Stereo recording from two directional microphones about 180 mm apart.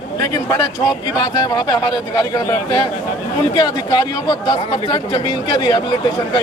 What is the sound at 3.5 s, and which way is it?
Speech, 25° left (ahead or behind).